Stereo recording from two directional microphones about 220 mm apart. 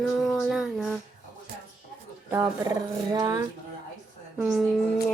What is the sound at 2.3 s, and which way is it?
Speech, 15° right (ahead or behind).